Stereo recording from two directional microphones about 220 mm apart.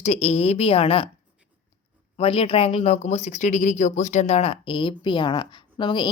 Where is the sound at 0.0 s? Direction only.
30° left (ahead or behind).